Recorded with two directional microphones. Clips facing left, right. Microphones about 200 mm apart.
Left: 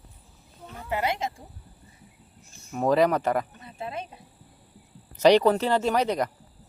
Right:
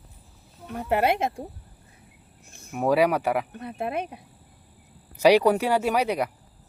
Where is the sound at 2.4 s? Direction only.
60° right (ahead or behind).